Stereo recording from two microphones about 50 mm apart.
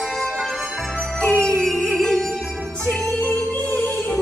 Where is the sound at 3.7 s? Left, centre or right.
Left.